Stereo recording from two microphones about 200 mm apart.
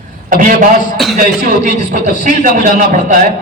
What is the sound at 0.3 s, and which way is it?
A man's voice, 40° right (ahead or behind).